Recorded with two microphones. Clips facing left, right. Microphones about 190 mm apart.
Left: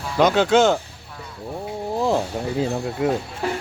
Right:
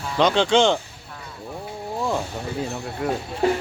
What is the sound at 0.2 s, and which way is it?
Speech, 5° left (ahead or behind).